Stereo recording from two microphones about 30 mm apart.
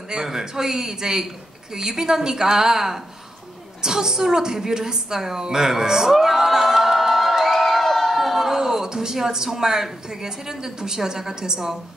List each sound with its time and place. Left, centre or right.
0.1 s a woman's voice: centre
8.2 s a sound: centre
10.0 s speech: centre